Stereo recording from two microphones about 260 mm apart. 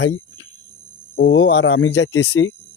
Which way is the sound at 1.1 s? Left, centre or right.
Left.